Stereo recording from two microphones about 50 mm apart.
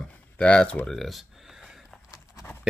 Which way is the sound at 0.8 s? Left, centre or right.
Centre.